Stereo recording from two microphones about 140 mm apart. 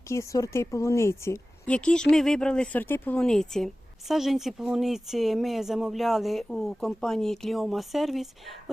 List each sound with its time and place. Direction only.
0.1 s speech: 20° left (ahead or behind)
1.6 s speech: 5° left (ahead or behind)